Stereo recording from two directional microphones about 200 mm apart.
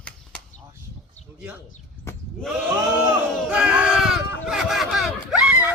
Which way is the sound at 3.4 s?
5° right (ahead or behind).